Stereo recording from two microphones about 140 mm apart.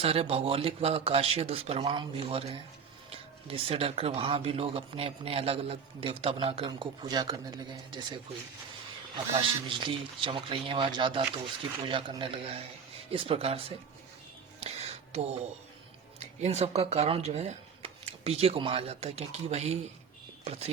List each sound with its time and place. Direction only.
0.0 s speech: 45° right (ahead or behind)
9.3 s speech: 40° right (ahead or behind)
14.6 s a sound: 50° right (ahead or behind)
16.2 s speech: 50° right (ahead or behind)